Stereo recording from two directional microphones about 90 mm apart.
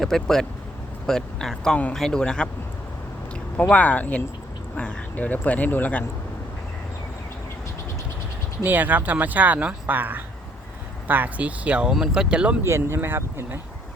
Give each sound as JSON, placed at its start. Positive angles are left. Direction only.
{"t": 0.0, "sound": "speech", "side_deg": 5}
{"t": 3.6, "sound": "speech", "side_deg": 15}
{"t": 8.6, "sound": "speech", "side_deg": -20}
{"t": 12.6, "sound": "speech", "side_deg": -30}